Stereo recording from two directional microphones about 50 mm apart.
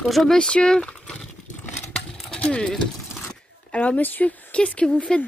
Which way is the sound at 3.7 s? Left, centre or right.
Left.